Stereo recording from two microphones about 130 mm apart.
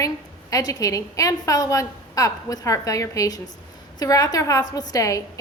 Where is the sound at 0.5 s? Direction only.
25° left (ahead or behind).